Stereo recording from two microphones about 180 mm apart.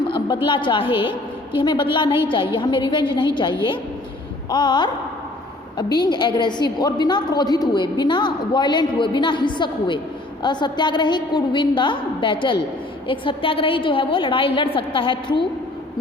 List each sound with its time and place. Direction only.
0.4 s a woman's voice: 25° left (ahead or behind)